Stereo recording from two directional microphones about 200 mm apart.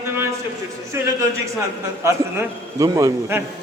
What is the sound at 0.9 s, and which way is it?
A man's voice, 10° right (ahead or behind).